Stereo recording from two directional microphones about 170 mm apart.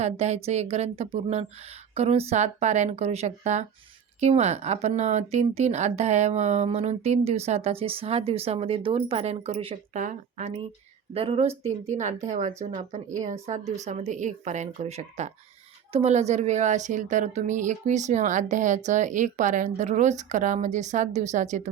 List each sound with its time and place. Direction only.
0.0 s a woman's voice: 40° right (ahead or behind)